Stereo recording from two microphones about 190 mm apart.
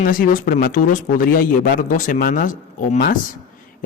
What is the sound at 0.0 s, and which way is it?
A man's voice, 45° left (ahead or behind).